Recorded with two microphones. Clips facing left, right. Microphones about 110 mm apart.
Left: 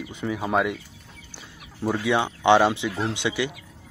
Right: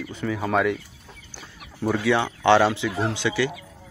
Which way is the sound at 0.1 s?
15° left (ahead or behind).